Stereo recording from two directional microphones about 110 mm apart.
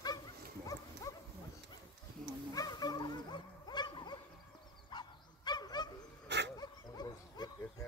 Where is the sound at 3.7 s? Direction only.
45° left (ahead or behind).